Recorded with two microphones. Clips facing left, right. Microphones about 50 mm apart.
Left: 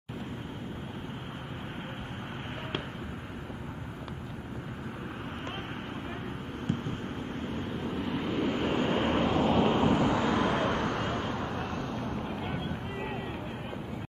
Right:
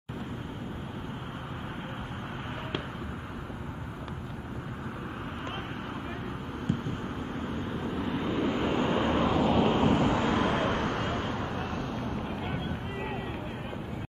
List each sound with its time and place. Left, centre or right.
7.9 s vehicle: centre
8.8 s vehicle: centre
9.5 s vehicle: centre